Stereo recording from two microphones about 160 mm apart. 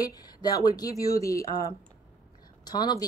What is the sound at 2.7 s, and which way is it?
Speech, 25° left (ahead or behind).